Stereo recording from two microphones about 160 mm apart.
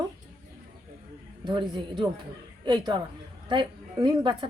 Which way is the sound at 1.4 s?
30° right (ahead or behind).